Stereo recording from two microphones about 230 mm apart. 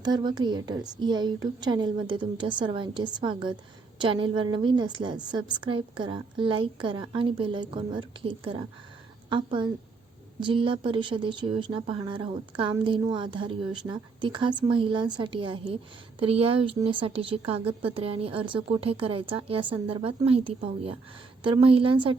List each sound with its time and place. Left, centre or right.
0.0 s a woman's voice: centre